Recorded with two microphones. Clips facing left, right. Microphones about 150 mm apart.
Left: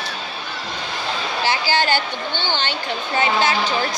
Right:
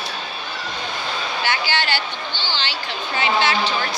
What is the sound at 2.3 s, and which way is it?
Speech, 55° left (ahead or behind).